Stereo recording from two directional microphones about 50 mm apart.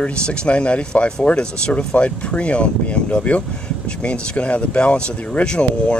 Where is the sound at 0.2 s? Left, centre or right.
Centre.